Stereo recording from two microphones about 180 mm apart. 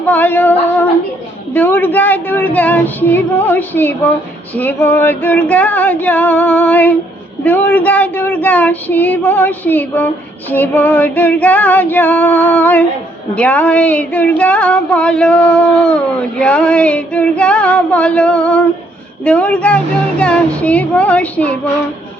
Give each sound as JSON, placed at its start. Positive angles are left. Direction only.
{"t": 0.1, "sound": "child singing", "side_deg": 10}